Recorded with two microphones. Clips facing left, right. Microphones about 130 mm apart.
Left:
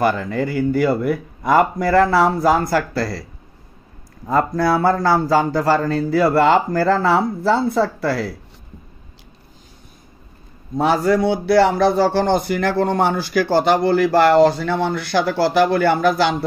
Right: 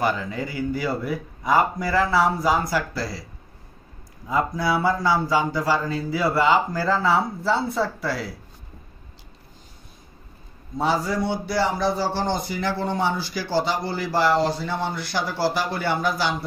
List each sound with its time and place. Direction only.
0.0 s a man's voice: 60° left (ahead or behind)
4.3 s a man's voice: 55° left (ahead or behind); by 8.3 s 75° left (ahead or behind)
10.8 s a man's voice: 65° left (ahead or behind)